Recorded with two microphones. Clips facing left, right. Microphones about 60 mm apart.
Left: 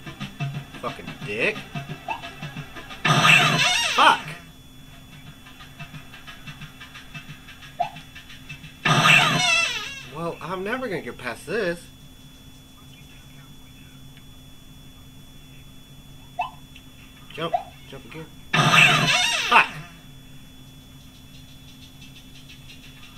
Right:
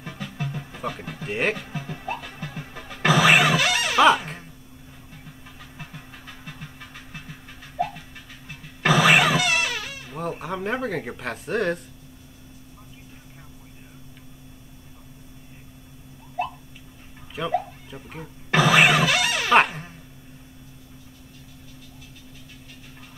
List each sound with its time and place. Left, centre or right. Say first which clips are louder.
0.0 s music: right 1 dB; centre
0.7 s speech: even; centre
1.7 s music: right 1 dB; centre
2.0 s music: left 2 dB; centre
4.0 s speech: even; centre
8.8 s cat: right 1 dB; centre
10.0 s speech: left 1 dB; centre
17.5 s music: even; centre
18.5 s music: right 1 dB; centre
19.5 s dog: even; centre